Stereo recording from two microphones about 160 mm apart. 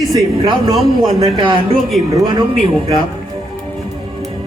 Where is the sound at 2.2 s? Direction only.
25° right (ahead or behind).